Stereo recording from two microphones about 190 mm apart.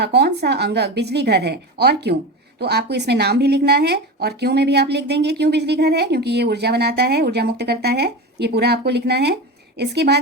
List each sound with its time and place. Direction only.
0.0 s speech: 60° right (ahead or behind)